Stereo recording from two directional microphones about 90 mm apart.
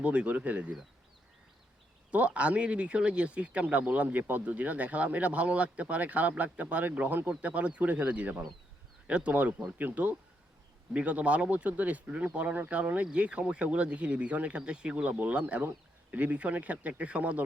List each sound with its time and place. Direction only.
0.0 s speech: 15° right (ahead or behind)
2.0 s speech: 15° right (ahead or behind)